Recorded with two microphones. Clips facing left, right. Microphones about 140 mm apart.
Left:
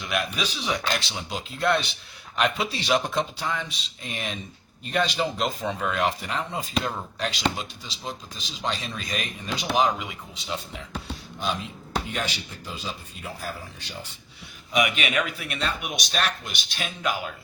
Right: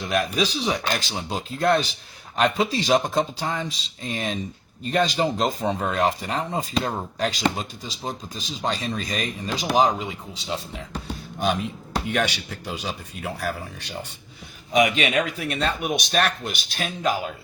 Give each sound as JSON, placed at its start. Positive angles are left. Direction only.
{"t": 0.0, "sound": "speech", "side_deg": -40}
{"t": 12.0, "sound": "speech", "side_deg": -75}
{"t": 14.7, "sound": "speech", "side_deg": -40}